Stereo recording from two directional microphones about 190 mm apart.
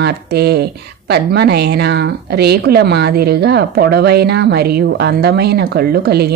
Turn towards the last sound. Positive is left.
turn(degrees=-60)  # may be behind; listen again after turning